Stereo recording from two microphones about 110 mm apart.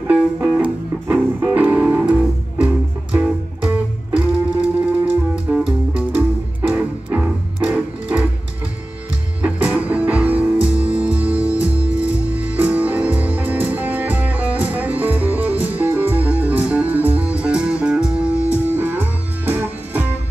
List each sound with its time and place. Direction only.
0.1 s music: 15° right (ahead or behind)
5.3 s music: 5° right (ahead or behind)
9.4 s music: 15° right (ahead or behind)